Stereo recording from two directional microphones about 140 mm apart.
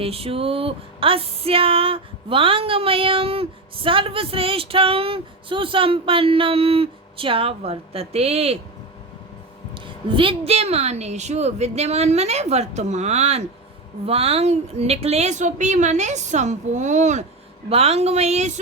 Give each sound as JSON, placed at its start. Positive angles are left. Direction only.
{"t": 0.0, "sound": "a sound", "side_deg": -45}
{"t": 9.7, "sound": "a woman's voice", "side_deg": -35}
{"t": 17.7, "sound": "a woman's voice", "side_deg": -45}